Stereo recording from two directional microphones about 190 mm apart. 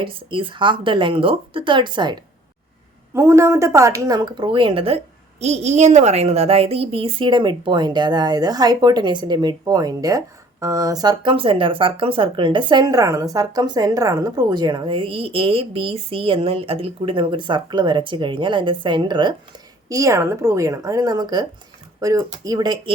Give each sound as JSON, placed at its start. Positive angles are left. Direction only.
{"t": 0.0, "sound": "a woman's voice", "side_deg": -25}